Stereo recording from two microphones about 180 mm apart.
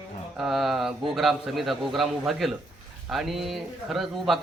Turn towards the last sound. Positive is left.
turn(degrees=0)  # may be behind; listen again after turning